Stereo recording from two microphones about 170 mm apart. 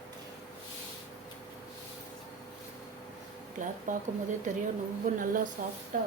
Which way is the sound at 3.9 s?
50° right (ahead or behind).